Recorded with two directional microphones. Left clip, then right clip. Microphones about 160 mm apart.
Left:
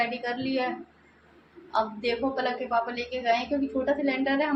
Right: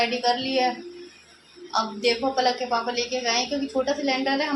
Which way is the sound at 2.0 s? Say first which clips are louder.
Right 5 dB; 20° right (ahead or behind).